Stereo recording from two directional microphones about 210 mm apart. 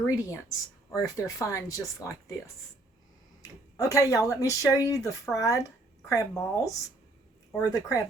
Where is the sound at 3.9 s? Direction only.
15° left (ahead or behind).